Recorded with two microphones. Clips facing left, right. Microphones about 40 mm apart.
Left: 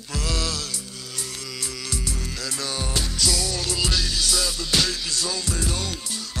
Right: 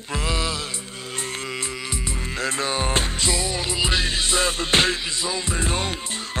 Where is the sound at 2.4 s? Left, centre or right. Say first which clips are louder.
Right 7 dB; right.